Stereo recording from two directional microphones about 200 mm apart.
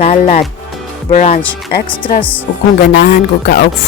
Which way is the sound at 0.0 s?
40° left (ahead or behind).